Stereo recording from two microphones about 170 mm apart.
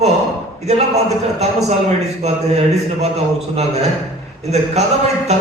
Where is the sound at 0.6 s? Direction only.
40° right (ahead or behind).